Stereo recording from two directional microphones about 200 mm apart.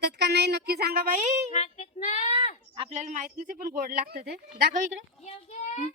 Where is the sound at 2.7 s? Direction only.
30° right (ahead or behind); by 4.8 s 50° right (ahead or behind).